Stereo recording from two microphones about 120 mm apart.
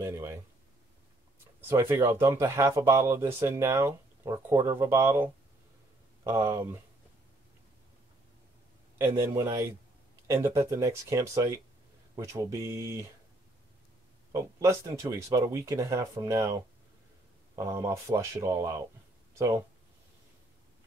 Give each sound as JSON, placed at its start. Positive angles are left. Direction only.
{"t": 0.0, "sound": "speech", "side_deg": -20}
{"t": 1.7, "sound": "speech", "side_deg": -20}
{"t": 8.9, "sound": "speech", "side_deg": -20}
{"t": 14.3, "sound": "speech", "side_deg": -25}
{"t": 17.6, "sound": "speech", "side_deg": -25}